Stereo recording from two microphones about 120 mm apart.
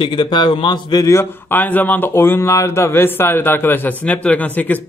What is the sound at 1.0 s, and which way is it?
Speech, 20° left (ahead or behind).